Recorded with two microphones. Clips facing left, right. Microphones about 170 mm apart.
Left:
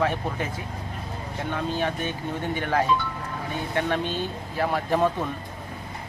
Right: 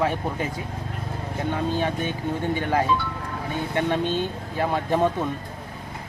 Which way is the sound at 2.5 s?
15° right (ahead or behind).